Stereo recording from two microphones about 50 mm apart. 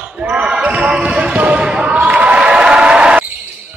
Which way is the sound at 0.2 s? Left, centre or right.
Right.